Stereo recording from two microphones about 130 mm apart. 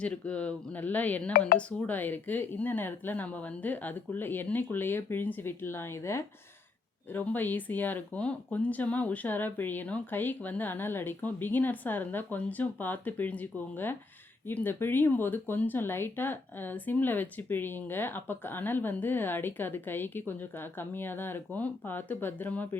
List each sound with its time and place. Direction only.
0.0 s speech: 10° left (ahead or behind)